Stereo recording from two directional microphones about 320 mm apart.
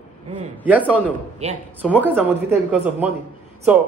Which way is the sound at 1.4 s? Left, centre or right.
Centre.